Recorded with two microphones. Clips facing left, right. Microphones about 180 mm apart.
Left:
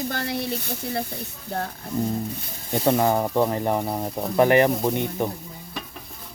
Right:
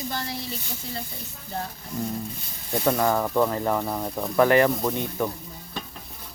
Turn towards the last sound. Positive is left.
turn(degrees=20)  # may be behind; listen again after turning